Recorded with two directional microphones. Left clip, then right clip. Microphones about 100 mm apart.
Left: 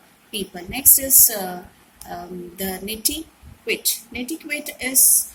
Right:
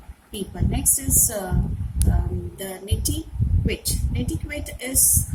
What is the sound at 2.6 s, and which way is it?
Speech, 70° right (ahead or behind).